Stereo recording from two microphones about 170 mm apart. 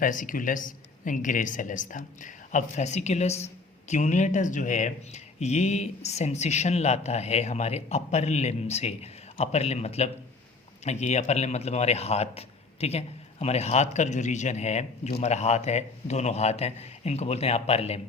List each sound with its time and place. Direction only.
0.0 s speech: 50° left (ahead or behind)